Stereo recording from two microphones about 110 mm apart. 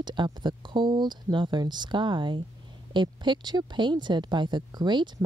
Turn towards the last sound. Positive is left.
turn(degrees=-40)  # may be behind; listen again after turning